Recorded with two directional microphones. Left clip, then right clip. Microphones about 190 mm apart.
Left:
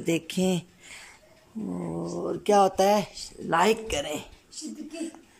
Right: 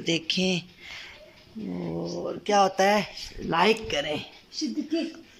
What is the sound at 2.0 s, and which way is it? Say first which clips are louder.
Speech: left 2 dB; 15° left (ahead or behind).